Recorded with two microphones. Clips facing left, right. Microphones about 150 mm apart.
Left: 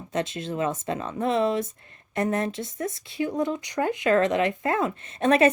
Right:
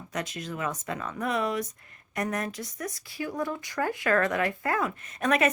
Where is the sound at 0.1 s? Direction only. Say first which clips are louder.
Left 6 dB; 25° left (ahead or behind).